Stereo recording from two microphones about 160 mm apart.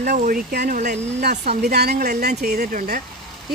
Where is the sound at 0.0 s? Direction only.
65° right (ahead or behind).